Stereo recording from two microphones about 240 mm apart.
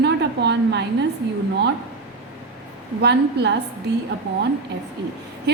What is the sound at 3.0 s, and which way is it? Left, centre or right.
Speech, right.